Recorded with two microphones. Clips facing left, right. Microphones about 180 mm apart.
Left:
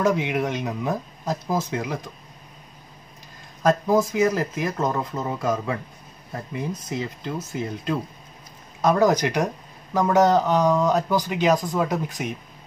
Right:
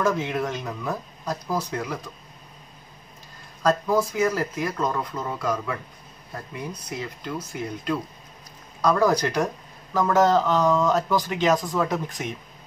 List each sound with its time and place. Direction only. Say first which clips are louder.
0.0 s speech: left 2 dB; 15° left (ahead or behind)
3.6 s speech: left 2 dB; 20° left (ahead or behind)